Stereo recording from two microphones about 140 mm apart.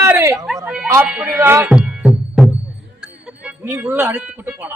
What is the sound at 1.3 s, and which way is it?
Music, 20° right (ahead or behind).